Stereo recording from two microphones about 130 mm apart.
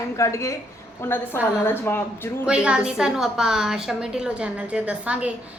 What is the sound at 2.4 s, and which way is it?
A woman's voice, 5° right (ahead or behind).